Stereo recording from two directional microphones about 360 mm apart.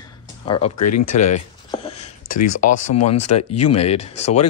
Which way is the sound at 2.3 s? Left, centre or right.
Left.